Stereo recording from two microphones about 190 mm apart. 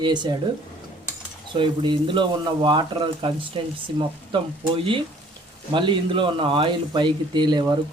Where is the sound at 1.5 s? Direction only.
25° right (ahead or behind).